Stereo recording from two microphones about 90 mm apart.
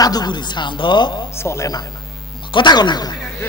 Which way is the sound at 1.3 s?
30° left (ahead or behind).